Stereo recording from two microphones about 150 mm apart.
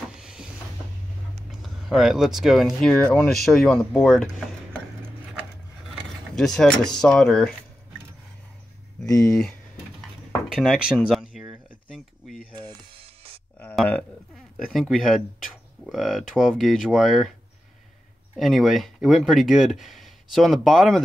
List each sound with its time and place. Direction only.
0.2 s vehicle: 5° right (ahead or behind)
1.5 s speech: centre (ahead or behind)
6.3 s speech: 5° left (ahead or behind)
9.0 s speech: 20° left (ahead or behind)
10.5 s a sound: centre (ahead or behind)
12.5 s music: 35° right (ahead or behind)
13.7 s a sound: 5° left (ahead or behind)
14.6 s speech: centre (ahead or behind)
18.3 s speech: centre (ahead or behind)